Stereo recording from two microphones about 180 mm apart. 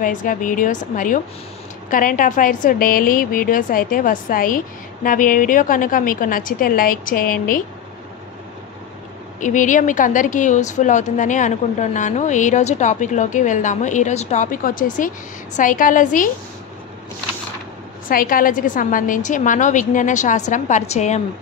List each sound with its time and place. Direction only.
0.0 s a woman's voice: 45° left (ahead or behind)
9.4 s a woman's voice: 45° left (ahead or behind)
18.0 s a woman's voice: 50° left (ahead or behind)